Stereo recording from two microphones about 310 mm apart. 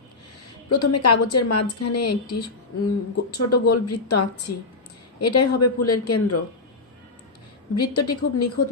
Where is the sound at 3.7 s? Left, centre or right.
Left.